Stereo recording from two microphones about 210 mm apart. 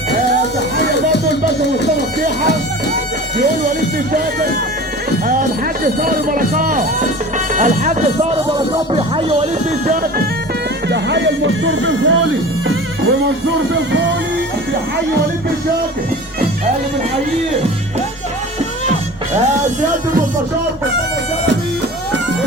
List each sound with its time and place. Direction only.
1.3 s music: 55° left (ahead or behind)
3.3 s speech: 40° right (ahead or behind); by 9.5 s 25° right (ahead or behind)
9.8 s speech: 40° right (ahead or behind)
10.8 s speech: 55° right (ahead or behind)